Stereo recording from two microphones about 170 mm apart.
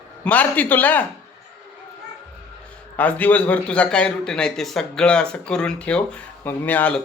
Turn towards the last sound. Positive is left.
turn(degrees=10)  # may be behind; listen again after turning